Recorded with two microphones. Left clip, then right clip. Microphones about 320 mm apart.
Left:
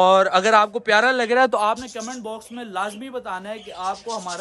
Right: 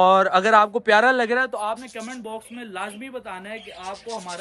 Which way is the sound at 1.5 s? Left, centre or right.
Left.